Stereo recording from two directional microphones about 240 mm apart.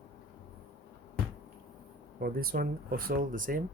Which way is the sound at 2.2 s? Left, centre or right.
Right.